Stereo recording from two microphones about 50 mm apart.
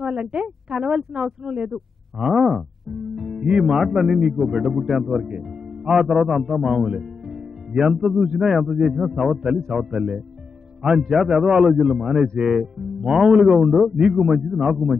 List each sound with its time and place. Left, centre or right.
0.1 s speech: centre
2.2 s a man's voice: centre
6.9 s music: centre
8.5 s speech: centre
9.1 s a man's voice: centre
11.2 s speech: centre